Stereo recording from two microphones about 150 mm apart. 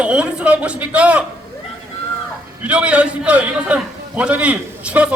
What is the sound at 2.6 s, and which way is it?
A man's voice, 10° right (ahead or behind).